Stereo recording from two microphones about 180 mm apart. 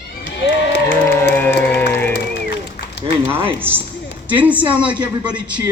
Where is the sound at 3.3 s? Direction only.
30° right (ahead or behind).